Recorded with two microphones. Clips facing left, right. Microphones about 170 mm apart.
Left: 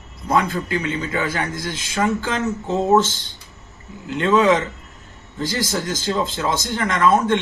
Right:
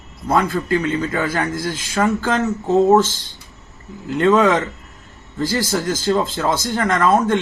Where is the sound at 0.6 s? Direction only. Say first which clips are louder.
Right 5 dB; 45° right (ahead or behind).